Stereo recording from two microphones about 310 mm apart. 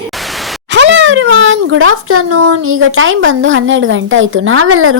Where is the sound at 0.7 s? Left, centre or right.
Right.